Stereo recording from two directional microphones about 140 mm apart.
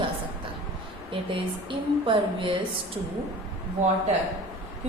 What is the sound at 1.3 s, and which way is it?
Speech, 40° right (ahead or behind).